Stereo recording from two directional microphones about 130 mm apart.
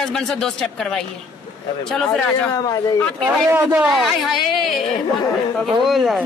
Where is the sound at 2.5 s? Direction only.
30° left (ahead or behind).